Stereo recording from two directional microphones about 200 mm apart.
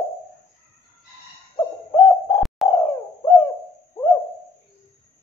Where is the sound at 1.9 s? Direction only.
15° left (ahead or behind).